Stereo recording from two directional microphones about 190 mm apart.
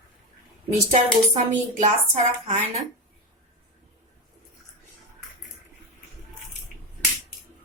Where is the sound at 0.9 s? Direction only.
40° right (ahead or behind).